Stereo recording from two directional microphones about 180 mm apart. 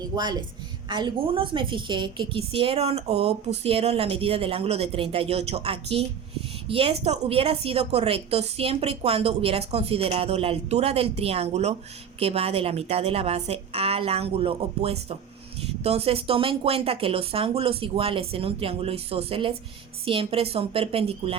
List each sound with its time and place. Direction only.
0.0 s a woman's voice: 20° right (ahead or behind)